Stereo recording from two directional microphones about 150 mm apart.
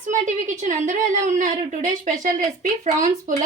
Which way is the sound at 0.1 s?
55° right (ahead or behind).